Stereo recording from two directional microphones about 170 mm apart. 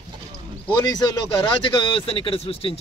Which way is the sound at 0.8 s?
20° left (ahead or behind).